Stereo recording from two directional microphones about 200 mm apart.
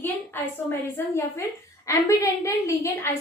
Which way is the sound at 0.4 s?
10° left (ahead or behind).